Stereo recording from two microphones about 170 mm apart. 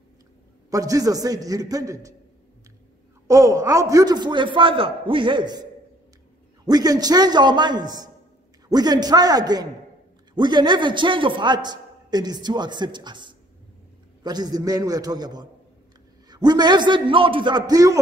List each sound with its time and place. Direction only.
0.7 s a man's voice: 20° right (ahead or behind)
3.3 s a man's voice: 20° right (ahead or behind)